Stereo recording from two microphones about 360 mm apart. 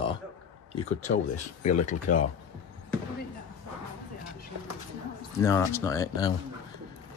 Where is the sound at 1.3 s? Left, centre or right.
Left.